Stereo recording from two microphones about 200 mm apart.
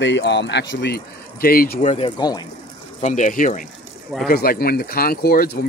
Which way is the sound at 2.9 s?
35° left (ahead or behind).